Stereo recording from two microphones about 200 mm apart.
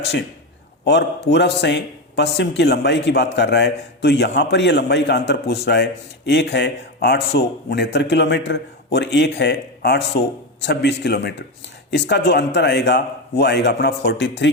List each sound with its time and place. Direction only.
0.9 s a man's voice: 60° left (ahead or behind)